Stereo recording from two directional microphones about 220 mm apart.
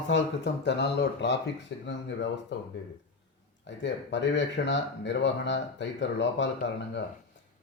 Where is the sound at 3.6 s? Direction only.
55° left (ahead or behind).